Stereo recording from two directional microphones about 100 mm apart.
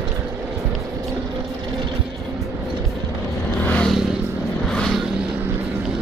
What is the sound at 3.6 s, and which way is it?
Vehicle, 15° left (ahead or behind).